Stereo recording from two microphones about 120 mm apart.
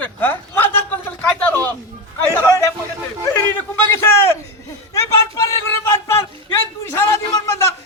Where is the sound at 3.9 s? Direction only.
20° left (ahead or behind).